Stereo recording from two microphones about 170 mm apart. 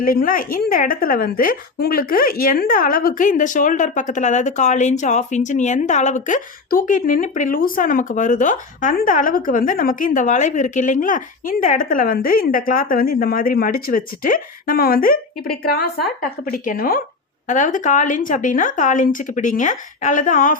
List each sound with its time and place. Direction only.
0.0 s a woman's voice: 55° left (ahead or behind)